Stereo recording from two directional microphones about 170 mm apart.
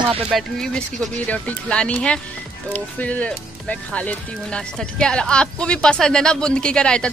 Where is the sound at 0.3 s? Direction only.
Centre (ahead or behind).